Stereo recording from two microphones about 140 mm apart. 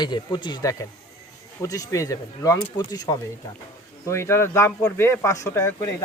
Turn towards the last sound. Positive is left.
turn(degrees=20)  # may be behind; listen again after turning